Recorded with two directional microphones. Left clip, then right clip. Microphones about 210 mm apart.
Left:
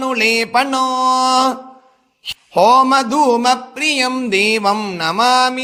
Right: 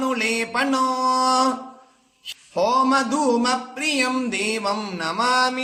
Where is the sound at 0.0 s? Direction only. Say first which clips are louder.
Left 7 dB; 40° left (ahead or behind).